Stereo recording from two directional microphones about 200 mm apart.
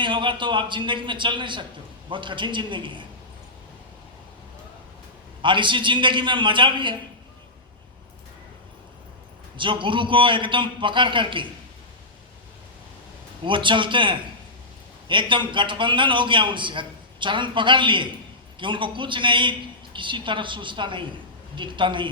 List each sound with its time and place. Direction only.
0.0 s a man's voice: 25° right (ahead or behind)
5.4 s a man's voice: 25° right (ahead or behind)
9.6 s a man's voice: 25° right (ahead or behind)
13.4 s a man's voice: 25° right (ahead or behind)